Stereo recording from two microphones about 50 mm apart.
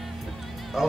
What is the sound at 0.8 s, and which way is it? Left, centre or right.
Speech, centre.